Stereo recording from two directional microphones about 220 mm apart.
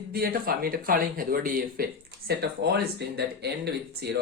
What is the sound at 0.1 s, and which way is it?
Speech, 45° right (ahead or behind).